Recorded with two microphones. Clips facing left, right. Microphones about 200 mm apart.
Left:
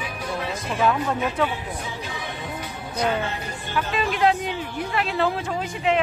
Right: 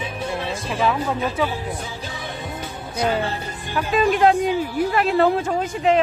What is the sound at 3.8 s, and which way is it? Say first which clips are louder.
Speech: right 5 dB; 45° right (ahead or behind).